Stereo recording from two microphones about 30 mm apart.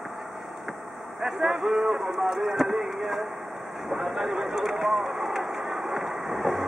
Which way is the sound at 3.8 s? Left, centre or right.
Centre.